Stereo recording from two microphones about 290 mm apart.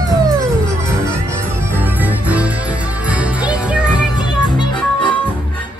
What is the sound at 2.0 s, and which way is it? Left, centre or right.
Music, centre.